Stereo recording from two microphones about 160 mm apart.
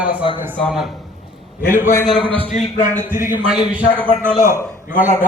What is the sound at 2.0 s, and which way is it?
Speech, 5° left (ahead or behind).